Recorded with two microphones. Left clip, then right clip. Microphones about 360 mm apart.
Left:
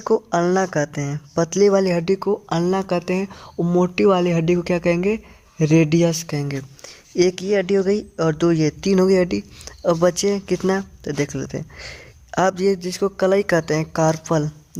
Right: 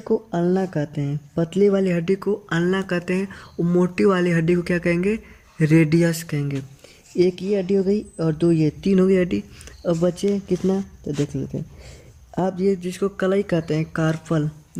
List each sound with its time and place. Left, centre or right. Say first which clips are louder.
0.3 s speech: left 4 dB; centre
12.4 s speech: left 4 dB; centre